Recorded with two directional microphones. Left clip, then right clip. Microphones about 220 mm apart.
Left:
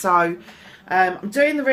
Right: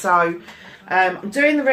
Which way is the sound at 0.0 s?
45° left (ahead or behind).